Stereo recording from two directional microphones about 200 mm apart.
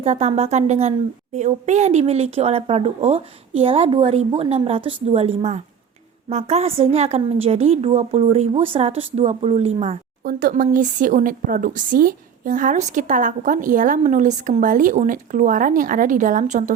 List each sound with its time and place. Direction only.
0.0 s speech: 30° right (ahead or behind)
10.2 s speech: 45° right (ahead or behind)